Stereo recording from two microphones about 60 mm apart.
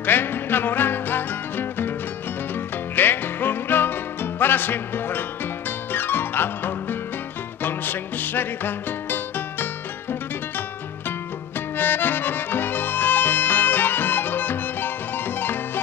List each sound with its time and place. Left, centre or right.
0.0 s music: left
3.0 s music: left
11.7 s music: left